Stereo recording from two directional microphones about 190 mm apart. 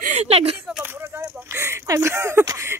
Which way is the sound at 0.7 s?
10° right (ahead or behind).